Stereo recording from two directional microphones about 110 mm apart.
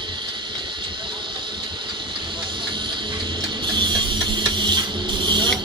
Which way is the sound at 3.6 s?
45° right (ahead or behind).